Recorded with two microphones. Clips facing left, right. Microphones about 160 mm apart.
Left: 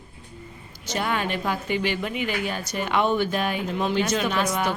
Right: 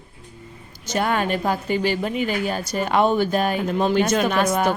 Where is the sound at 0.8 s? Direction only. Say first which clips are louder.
Right 4 dB; 45° right (ahead or behind).